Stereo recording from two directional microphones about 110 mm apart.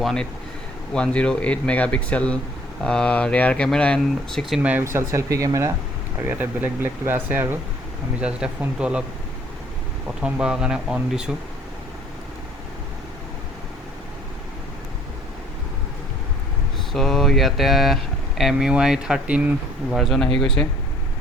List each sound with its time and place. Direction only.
0.0 s speech: 5° left (ahead or behind)
4.8 s speech: 25° right (ahead or behind)
6.1 s speech: 15° right (ahead or behind)
8.2 s speech: 10° right (ahead or behind)
10.2 s speech: 10° right (ahead or behind)
16.9 s speech: 5° left (ahead or behind)
19.9 s speech: centre (ahead or behind)